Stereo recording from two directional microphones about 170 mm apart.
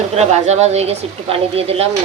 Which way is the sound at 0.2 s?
40° right (ahead or behind).